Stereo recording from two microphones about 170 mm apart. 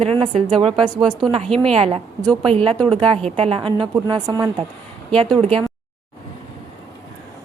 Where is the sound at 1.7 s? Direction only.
35° right (ahead or behind).